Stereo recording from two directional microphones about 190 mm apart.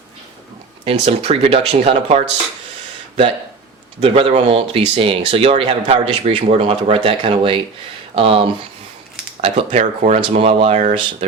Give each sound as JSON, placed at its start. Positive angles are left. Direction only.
{"t": 0.9, "sound": "speech", "side_deg": -30}
{"t": 4.0, "sound": "speech", "side_deg": -30}